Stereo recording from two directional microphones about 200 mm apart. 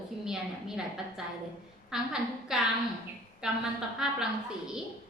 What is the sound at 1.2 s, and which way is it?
A woman's voice, centre (ahead or behind).